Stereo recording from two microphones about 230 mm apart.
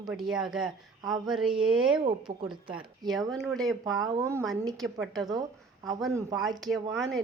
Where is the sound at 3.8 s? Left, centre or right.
Centre.